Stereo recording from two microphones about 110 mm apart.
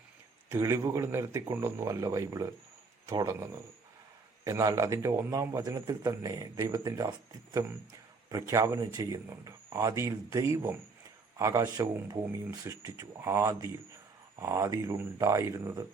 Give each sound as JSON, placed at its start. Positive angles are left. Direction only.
{"t": 0.5, "sound": "speech", "side_deg": -25}
{"t": 8.3, "sound": "speech", "side_deg": -30}